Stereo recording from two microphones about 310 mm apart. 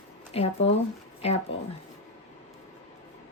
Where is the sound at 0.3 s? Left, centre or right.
Centre.